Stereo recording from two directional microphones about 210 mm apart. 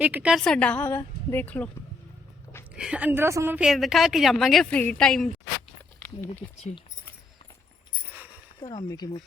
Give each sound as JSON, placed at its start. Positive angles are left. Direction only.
{"t": 0.0, "sound": "a woman's voice", "side_deg": -5}
{"t": 2.7, "sound": "a woman's voice", "side_deg": -5}
{"t": 6.6, "sound": "speech", "side_deg": 30}
{"t": 8.6, "sound": "speech", "side_deg": 20}